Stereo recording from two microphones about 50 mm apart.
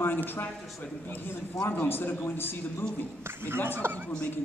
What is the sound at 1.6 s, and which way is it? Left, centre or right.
Speech, left.